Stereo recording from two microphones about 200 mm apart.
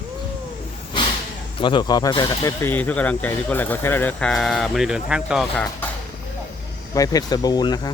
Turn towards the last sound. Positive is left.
turn(degrees=20)  # may be behind; listen again after turning